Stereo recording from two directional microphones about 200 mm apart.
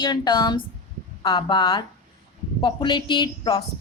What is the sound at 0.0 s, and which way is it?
Speech, 20° left (ahead or behind).